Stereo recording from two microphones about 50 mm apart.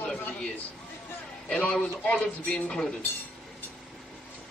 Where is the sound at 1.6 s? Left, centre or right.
Left.